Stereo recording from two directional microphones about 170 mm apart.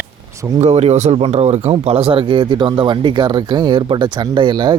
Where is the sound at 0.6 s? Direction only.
40° right (ahead or behind).